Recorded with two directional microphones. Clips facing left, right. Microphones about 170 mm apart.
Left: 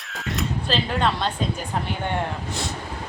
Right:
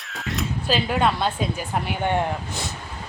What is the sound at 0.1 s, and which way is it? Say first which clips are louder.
Speech: left 1 dB; centre (ahead or behind).